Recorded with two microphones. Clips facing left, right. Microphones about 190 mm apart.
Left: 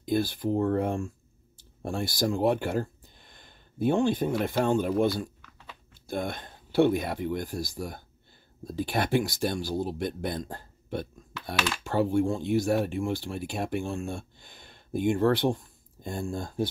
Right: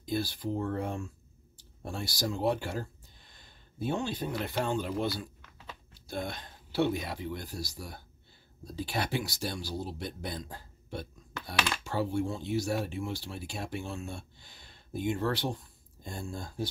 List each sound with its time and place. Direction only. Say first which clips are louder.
0.0 s speech: left 6 dB; 55° left (ahead or behind)